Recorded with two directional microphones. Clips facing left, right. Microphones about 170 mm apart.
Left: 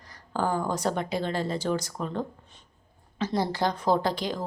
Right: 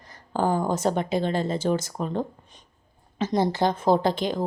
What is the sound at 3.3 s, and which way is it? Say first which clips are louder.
Speech: right 4 dB; 20° right (ahead or behind).